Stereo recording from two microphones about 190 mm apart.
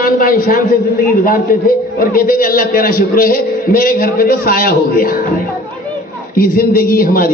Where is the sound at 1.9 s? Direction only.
50° left (ahead or behind).